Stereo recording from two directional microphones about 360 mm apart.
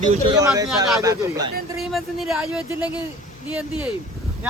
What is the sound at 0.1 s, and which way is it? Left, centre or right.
A man's voice, centre.